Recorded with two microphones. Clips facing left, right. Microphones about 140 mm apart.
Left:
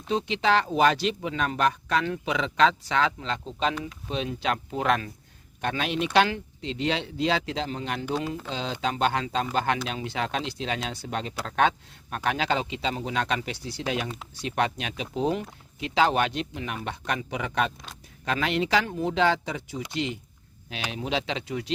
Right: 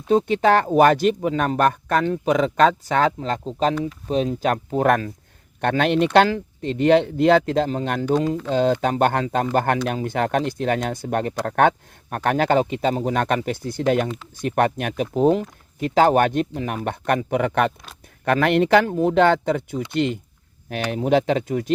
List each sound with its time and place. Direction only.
0.1 s speech: 50° right (ahead or behind)
5.5 s a man's voice: 60° right (ahead or behind)